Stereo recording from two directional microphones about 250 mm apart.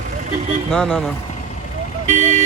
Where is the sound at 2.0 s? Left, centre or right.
Right.